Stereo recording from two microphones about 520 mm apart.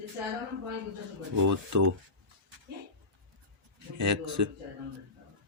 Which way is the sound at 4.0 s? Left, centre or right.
Right.